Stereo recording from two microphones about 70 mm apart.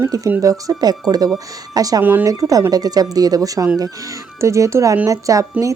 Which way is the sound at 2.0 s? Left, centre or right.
Right.